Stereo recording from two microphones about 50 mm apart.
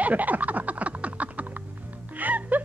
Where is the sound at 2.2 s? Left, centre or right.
Right.